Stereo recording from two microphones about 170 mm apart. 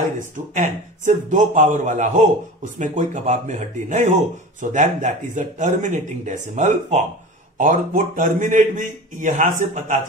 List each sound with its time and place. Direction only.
0.6 s speech: 45° right (ahead or behind)